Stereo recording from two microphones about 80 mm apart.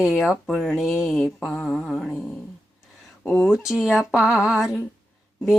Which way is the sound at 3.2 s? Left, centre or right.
Left.